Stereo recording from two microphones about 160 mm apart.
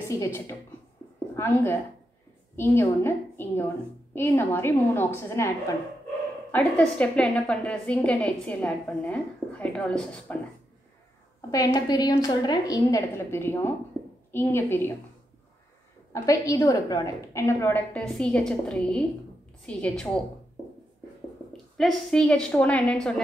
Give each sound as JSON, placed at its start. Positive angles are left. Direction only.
{"t": 0.1, "sound": "a woman's voice", "side_deg": 15}
{"t": 6.5, "sound": "a woman's voice", "side_deg": 5}
{"t": 11.5, "sound": "a woman's voice", "side_deg": 25}
{"t": 16.1, "sound": "a woman's voice", "side_deg": 20}
{"t": 21.7, "sound": "a woman's voice", "side_deg": 0}